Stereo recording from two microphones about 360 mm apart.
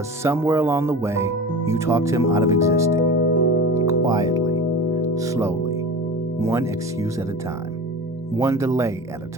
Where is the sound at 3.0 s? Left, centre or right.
Left.